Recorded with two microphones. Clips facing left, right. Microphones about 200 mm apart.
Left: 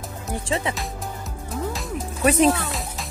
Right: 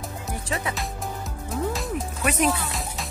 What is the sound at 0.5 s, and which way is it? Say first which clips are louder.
Speech: left 5 dB; 25° left (ahead or behind).